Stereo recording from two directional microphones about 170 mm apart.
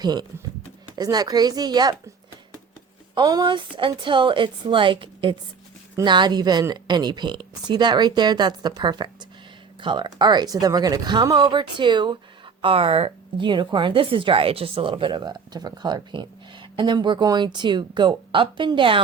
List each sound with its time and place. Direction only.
0.0 s a woman's voice: 25° right (ahead or behind)
3.2 s a woman's voice: 25° right (ahead or behind)